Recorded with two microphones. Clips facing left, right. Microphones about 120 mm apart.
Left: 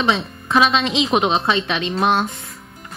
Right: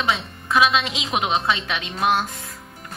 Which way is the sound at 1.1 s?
30° left (ahead or behind).